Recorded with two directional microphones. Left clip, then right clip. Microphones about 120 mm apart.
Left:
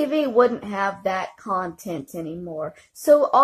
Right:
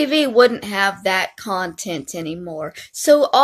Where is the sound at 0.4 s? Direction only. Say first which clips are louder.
Right 5 dB; 15° right (ahead or behind).